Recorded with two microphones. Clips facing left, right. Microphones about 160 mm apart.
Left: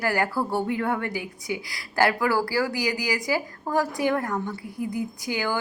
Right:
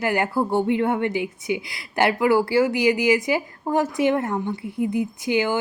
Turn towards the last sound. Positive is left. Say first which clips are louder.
# right 6 dB
turn(degrees=-20)  # may be behind; listen again after turning